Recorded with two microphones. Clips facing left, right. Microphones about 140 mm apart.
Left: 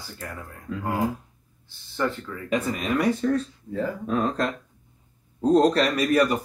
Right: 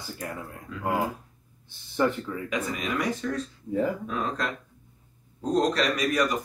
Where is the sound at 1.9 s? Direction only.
20° right (ahead or behind).